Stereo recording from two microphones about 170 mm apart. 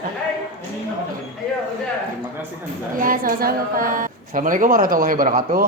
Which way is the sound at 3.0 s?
55° right (ahead or behind).